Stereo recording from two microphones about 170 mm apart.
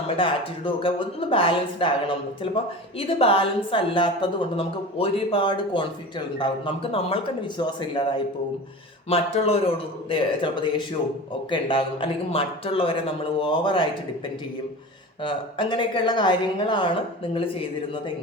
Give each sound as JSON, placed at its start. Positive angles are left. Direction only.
{"t": 0.2, "sound": "speech", "side_deg": 30}
{"t": 15.2, "sound": "a woman's voice", "side_deg": 30}